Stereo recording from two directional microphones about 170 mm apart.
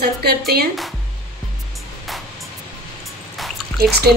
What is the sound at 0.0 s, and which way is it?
Speech, 70° right (ahead or behind).